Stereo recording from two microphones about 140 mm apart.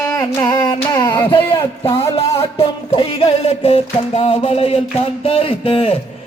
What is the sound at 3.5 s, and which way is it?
Speech, 50° left (ahead or behind).